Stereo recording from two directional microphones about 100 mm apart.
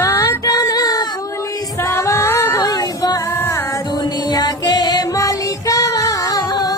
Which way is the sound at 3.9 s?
45° left (ahead or behind).